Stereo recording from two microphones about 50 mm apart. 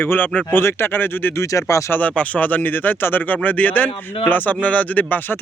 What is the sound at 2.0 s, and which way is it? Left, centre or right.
Speech, left.